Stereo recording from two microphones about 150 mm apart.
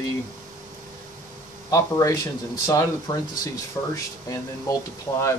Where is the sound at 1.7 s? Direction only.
20° left (ahead or behind).